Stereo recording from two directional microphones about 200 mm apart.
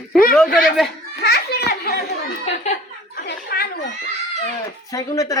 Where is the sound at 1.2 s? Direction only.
55° left (ahead or behind).